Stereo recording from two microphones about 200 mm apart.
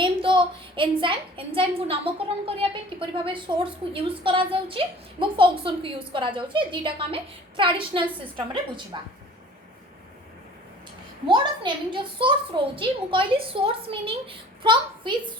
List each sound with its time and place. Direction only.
0.0 s a woman's voice: 25° right (ahead or behind)
11.3 s a woman's voice: 25° right (ahead or behind)